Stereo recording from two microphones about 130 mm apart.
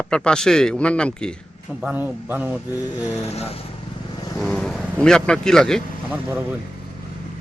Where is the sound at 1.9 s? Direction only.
15° right (ahead or behind).